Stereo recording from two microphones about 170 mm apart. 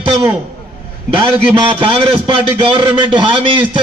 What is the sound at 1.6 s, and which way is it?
A man's voice, 30° right (ahead or behind).